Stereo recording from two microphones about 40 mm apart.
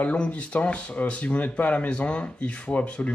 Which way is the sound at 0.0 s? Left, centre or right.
Left.